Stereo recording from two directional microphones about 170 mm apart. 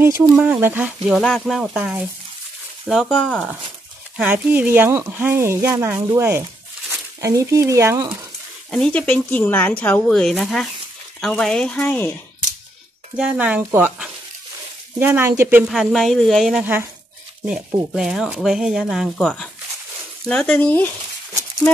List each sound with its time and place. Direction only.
0.0 s speech: 10° right (ahead or behind)
1.0 s speech: centre (ahead or behind)
4.2 s speech: 10° right (ahead or behind)
8.6 s speech: 5° left (ahead or behind)
13.1 s speech: 5° right (ahead or behind)
15.7 s speech: centre (ahead or behind)
17.9 s speech: 5° right (ahead or behind)